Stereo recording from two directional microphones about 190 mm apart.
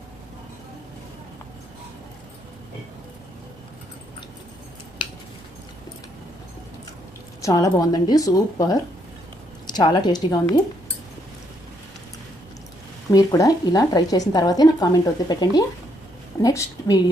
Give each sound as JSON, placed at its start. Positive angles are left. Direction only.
{"t": 7.4, "sound": "a woman's voice", "side_deg": 15}
{"t": 13.1, "sound": "a woman's voice", "side_deg": 20}